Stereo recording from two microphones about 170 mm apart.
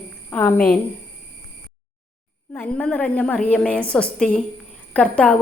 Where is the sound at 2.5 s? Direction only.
10° left (ahead or behind).